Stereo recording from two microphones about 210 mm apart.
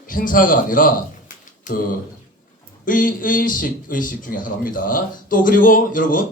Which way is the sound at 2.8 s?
40° left (ahead or behind).